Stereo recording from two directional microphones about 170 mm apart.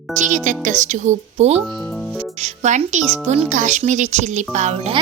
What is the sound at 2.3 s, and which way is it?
A woman's voice, 40° right (ahead or behind).